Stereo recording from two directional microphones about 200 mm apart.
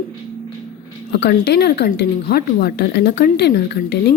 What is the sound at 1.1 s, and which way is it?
A woman's voice, 55° left (ahead or behind).